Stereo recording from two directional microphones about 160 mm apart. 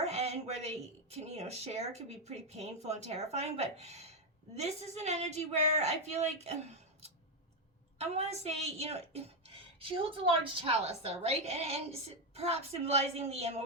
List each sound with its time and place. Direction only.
0.0 s a sound: 45° right (ahead or behind)
1.1 s speech: 40° right (ahead or behind)
7.9 s a woman's voice: 40° right (ahead or behind)